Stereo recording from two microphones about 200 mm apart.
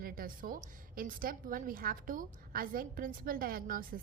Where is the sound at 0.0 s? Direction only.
45° right (ahead or behind).